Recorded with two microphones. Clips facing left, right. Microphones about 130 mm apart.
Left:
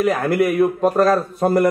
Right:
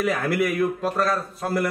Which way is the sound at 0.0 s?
40° left (ahead or behind).